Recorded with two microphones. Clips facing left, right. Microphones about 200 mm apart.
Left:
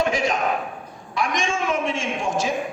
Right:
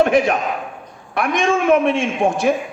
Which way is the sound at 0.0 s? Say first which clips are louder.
Right 7 dB; 60° right (ahead or behind).